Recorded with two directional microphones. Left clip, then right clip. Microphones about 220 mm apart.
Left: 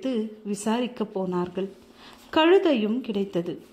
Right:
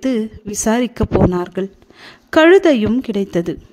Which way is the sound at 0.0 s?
45° right (ahead or behind).